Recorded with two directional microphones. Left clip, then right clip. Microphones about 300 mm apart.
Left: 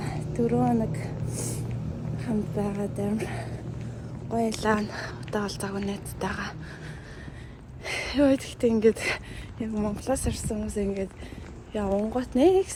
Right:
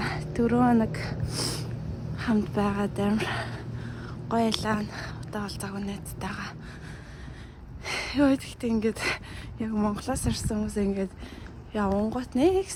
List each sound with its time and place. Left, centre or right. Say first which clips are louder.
0.1 s speech: left 3 dB; centre
2.1 s a woman's voice: right 3 dB; centre
7.9 s a woman's voice: left 1 dB; centre